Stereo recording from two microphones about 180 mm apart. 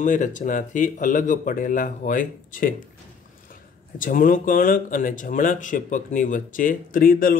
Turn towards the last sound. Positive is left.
turn(degrees=55)  # may be behind; listen again after turning